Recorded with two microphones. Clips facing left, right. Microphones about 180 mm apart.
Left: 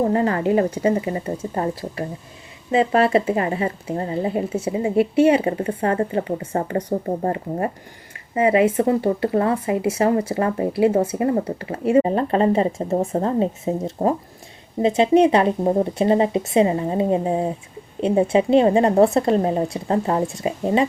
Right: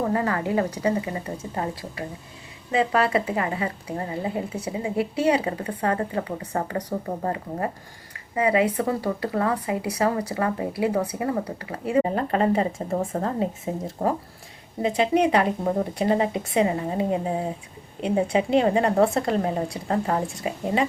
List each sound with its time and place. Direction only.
0.0 s speech: 25° left (ahead or behind)
2.7 s speech: 25° left (ahead or behind)
6.9 s a woman's voice: 35° left (ahead or behind)